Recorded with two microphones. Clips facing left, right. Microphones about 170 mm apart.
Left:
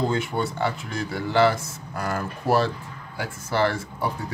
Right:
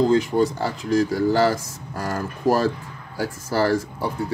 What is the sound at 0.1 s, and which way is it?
Speech, 35° right (ahead or behind).